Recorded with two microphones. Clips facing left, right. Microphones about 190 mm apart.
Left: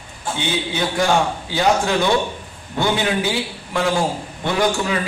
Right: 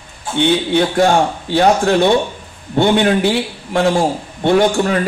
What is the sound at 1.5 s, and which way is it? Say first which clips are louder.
Speech: right 6 dB; 60° right (ahead or behind).